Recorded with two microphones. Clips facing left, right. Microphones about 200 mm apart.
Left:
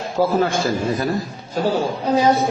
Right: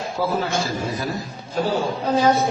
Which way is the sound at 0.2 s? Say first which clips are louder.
Left 5 dB; 50° left (ahead or behind).